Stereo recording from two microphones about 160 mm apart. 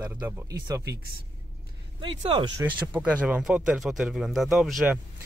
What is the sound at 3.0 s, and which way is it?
Speech, 5° right (ahead or behind).